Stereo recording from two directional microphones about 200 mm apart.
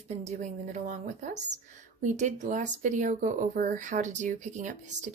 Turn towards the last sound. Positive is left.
turn(degrees=-40)  # may be behind; listen again after turning